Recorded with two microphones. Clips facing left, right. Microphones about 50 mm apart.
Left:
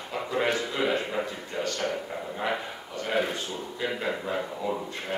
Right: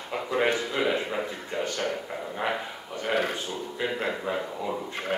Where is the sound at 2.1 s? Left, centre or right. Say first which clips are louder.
Even; centre.